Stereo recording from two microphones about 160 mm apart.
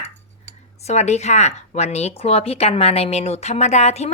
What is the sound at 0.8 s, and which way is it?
A woman's voice, 45° left (ahead or behind).